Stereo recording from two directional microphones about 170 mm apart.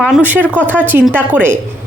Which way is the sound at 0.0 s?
10° right (ahead or behind).